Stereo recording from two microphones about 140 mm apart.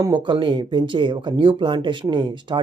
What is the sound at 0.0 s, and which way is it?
Speech, 35° right (ahead or behind).